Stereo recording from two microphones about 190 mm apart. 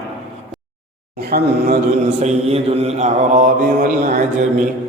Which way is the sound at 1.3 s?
55° right (ahead or behind).